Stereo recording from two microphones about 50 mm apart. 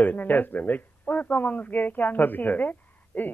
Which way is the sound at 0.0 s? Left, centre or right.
Left.